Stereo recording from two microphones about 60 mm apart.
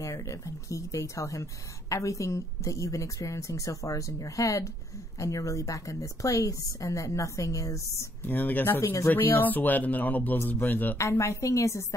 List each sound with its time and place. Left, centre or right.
0.0 s a woman's voice: left
8.3 s speech: left
11.0 s speech: left